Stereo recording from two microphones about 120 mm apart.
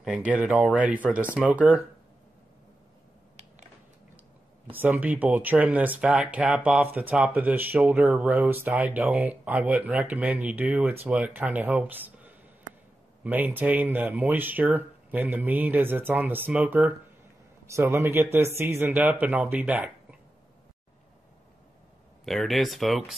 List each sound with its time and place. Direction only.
0.0 s speech: 10° right (ahead or behind)
4.7 s speech: 15° right (ahead or behind)
22.2 s speech: centre (ahead or behind)